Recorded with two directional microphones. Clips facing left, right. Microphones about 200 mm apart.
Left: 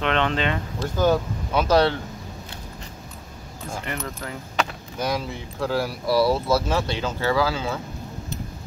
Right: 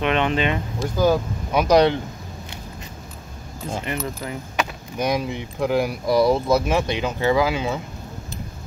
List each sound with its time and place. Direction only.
0.0 s speech: 15° right (ahead or behind)
3.7 s speech: 15° right (ahead or behind)